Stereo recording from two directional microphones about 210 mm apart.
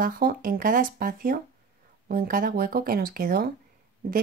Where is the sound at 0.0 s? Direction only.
45° right (ahead or behind).